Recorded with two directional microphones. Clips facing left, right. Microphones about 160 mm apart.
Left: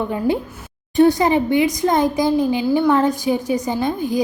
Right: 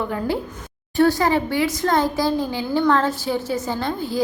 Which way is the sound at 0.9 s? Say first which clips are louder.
Left 3 dB; 20° left (ahead or behind).